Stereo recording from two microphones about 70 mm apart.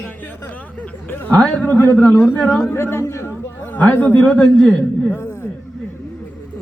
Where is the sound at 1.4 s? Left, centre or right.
Centre.